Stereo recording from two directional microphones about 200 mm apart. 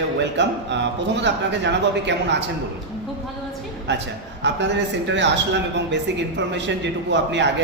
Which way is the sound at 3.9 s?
60° right (ahead or behind).